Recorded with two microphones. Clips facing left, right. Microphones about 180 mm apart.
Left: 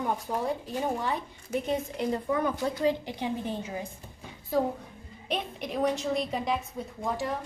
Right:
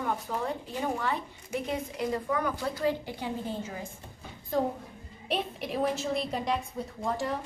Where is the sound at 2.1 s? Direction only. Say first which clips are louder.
Left 2 dB; 25° left (ahead or behind).